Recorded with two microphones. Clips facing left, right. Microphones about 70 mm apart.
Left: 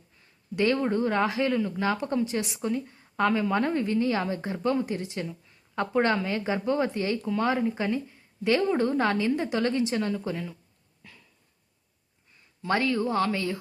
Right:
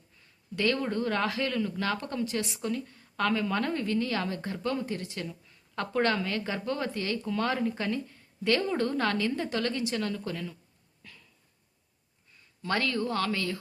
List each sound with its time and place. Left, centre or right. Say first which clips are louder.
0.5 s a woman's voice: left 4 dB; left
12.6 s speech: left 4 dB; centre